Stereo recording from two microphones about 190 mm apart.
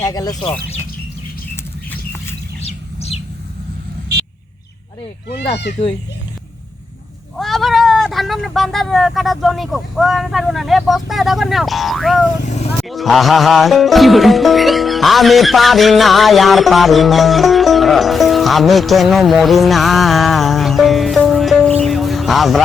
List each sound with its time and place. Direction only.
0.0 s speech: 20° left (ahead or behind)
2.6 s bird: 35° left (ahead or behind)
7.3 s speech: centre (ahead or behind)
12.4 s vehicle: 35° left (ahead or behind)
12.9 s music: centre (ahead or behind)